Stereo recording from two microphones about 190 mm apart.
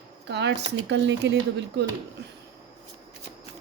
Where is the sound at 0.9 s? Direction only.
65° right (ahead or behind).